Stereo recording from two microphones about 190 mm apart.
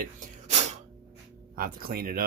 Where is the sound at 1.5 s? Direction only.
50° right (ahead or behind).